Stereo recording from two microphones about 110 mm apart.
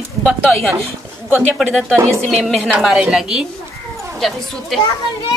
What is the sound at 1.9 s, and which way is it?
Speech, 25° right (ahead or behind).